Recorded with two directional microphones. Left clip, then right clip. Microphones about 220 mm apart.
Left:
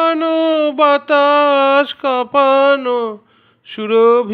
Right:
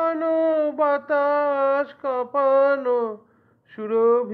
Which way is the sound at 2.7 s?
30° left (ahead or behind).